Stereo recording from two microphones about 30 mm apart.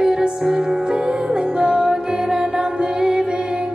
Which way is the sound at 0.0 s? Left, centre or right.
Right.